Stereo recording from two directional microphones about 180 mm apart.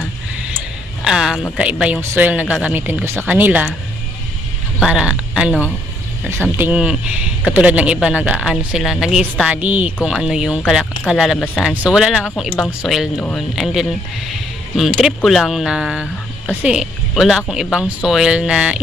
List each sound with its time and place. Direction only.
1.0 s a sound: 5° right (ahead or behind)
1.5 s speech: 5° right (ahead or behind)
4.8 s a woman's voice: 5° right (ahead or behind)